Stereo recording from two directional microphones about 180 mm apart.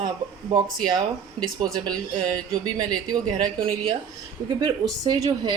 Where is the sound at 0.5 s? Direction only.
25° right (ahead or behind).